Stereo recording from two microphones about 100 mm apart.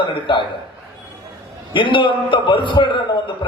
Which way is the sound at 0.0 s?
55° left (ahead or behind).